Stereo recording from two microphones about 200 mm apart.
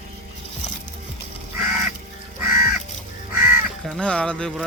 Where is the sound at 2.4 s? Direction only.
10° right (ahead or behind).